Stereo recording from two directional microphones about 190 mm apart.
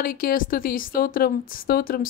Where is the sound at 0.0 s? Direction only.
50° left (ahead or behind).